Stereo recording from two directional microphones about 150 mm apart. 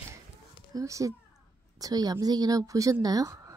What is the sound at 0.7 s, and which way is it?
A woman's voice, 20° right (ahead or behind).